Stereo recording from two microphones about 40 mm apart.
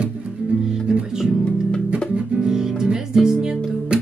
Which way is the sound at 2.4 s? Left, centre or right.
Centre.